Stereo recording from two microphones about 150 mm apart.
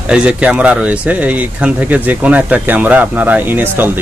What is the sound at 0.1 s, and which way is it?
Speech, 5° right (ahead or behind).